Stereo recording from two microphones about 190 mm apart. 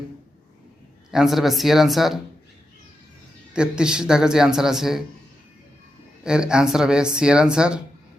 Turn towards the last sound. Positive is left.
turn(degrees=-5)  # may be behind; listen again after turning